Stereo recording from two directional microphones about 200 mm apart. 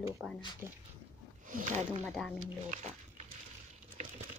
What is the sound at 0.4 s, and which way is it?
Speech, 20° left (ahead or behind).